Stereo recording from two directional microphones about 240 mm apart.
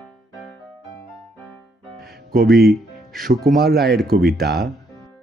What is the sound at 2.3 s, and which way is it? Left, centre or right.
Speech, right.